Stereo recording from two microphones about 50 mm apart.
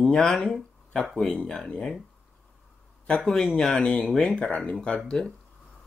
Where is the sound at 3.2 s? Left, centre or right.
Centre.